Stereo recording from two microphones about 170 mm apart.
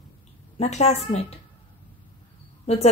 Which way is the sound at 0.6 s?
40° left (ahead or behind).